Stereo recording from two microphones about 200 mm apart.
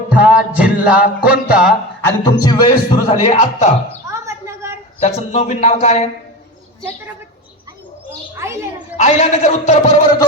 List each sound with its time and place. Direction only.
0.1 s music: 5° right (ahead or behind)
2.0 s a man's voice: 20° left (ahead or behind)
4.1 s chirp: 15° right (ahead or behind)
4.9 s speech: 30° left (ahead or behind)
8.4 s music: 15° right (ahead or behind)
9.0 s speech: 35° left (ahead or behind)